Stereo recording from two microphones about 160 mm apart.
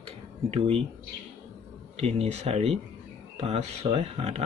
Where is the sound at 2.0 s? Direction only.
40° right (ahead or behind).